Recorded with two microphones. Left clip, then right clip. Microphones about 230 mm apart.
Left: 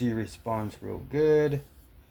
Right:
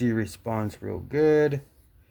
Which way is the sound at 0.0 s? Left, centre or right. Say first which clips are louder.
Right 3 dB; right.